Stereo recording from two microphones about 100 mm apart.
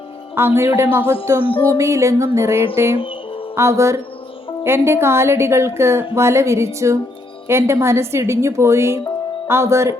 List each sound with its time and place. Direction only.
0.3 s a woman's voice: 25° right (ahead or behind)
3.0 s music: 60° left (ahead or behind)
3.5 s a woman's voice: 30° right (ahead or behind)